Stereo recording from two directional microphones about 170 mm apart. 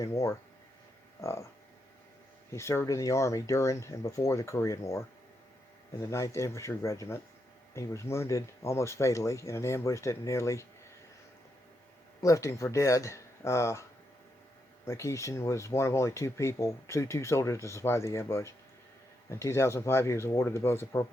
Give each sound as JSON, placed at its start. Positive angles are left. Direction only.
{"t": 0.0, "sound": "speech", "side_deg": 20}
{"t": 2.5, "sound": "speech", "side_deg": 15}
{"t": 12.2, "sound": "speech", "side_deg": 20}
{"t": 14.8, "sound": "speech", "side_deg": 15}